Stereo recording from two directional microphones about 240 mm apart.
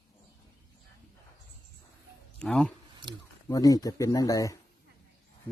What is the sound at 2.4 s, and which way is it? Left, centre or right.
Speech, centre.